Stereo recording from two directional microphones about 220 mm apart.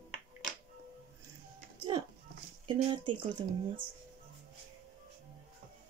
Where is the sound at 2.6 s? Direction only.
20° right (ahead or behind).